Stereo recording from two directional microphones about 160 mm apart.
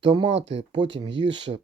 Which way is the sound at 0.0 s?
30° right (ahead or behind).